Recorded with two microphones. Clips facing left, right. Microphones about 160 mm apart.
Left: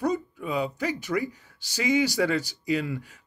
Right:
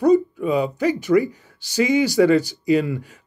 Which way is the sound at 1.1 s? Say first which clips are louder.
Right 11 dB; 45° right (ahead or behind).